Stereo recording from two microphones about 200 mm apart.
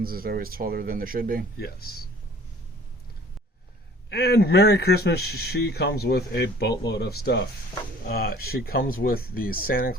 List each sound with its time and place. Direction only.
0.0 s speech: 50° right (ahead or behind)
1.5 s speech: 50° left (ahead or behind)
4.1 s speech: 50° left (ahead or behind)